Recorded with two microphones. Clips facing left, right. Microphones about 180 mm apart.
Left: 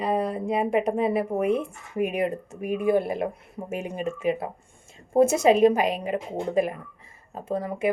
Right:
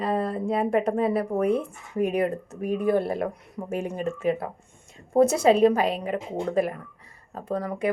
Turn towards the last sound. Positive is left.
turn(degrees=25)  # may be behind; listen again after turning